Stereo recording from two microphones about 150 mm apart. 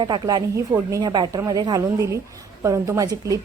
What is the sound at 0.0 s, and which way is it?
A woman's voice, 30° right (ahead or behind).